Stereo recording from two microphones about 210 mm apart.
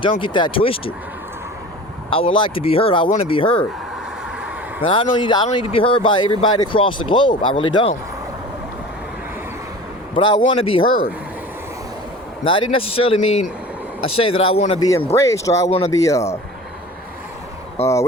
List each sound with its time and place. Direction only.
0.0 s speech: 25° left (ahead or behind)
2.0 s speech: 25° left (ahead or behind)
4.8 s speech: 25° left (ahead or behind)
10.3 s speech: 25° left (ahead or behind)
12.7 s speech: 25° left (ahead or behind)
15.1 s speech: 15° left (ahead or behind)
17.8 s speech: 10° left (ahead or behind)